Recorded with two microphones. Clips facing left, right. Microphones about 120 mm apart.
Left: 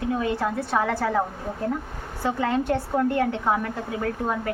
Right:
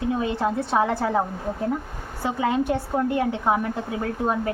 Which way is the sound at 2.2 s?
15° right (ahead or behind).